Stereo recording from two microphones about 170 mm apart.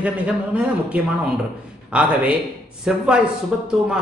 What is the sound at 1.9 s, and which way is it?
A man's voice, 5° right (ahead or behind).